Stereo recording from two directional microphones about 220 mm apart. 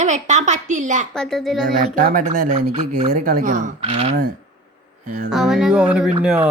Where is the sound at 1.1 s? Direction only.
Centre (ahead or behind).